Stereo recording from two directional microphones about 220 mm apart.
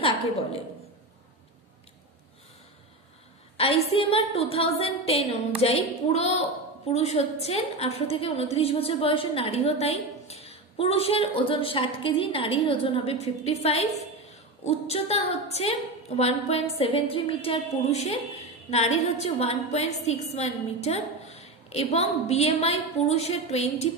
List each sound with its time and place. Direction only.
3.5 s a woman's voice: 25° left (ahead or behind)